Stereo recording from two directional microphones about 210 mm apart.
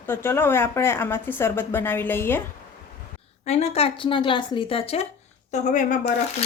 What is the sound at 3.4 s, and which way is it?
Speech, 30° left (ahead or behind).